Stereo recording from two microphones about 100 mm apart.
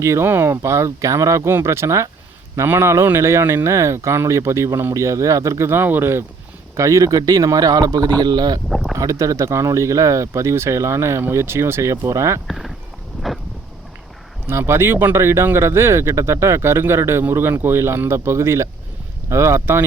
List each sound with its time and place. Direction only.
0.0 s speech: 25° right (ahead or behind); by 8.6 s 45° right (ahead or behind)
9.0 s speech: 35° right (ahead or behind)
12.5 s a sound: centre (ahead or behind)
14.4 s speech: 25° right (ahead or behind)